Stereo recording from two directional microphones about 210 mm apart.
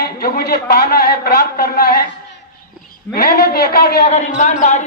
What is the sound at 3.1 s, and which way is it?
Speech, 45° left (ahead or behind).